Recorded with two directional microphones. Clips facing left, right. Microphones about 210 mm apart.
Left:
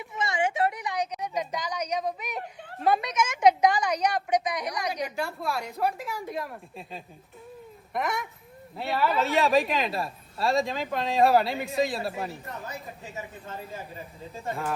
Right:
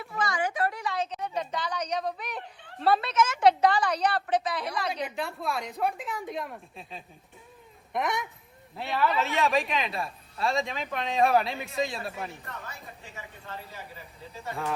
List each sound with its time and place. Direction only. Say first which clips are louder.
0.0 s a sound: left 2 dB; 20° left (ahead or behind)
2.8 s a woman's voice: right 1 dB; 10° left (ahead or behind)
5.1 s a woman's voice: left 1 dB; centre (ahead or behind)
11.9 s speech: left 4 dB; 35° left (ahead or behind)